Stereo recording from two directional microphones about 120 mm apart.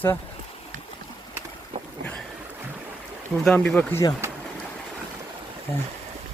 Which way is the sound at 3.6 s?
5° left (ahead or behind).